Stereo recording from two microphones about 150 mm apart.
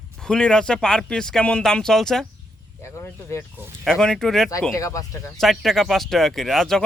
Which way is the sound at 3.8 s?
5° left (ahead or behind).